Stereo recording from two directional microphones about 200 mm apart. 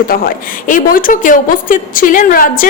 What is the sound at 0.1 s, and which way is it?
A woman's voice, 45° left (ahead or behind).